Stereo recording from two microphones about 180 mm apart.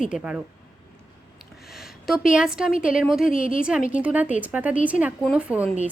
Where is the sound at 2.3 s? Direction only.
5° right (ahead or behind).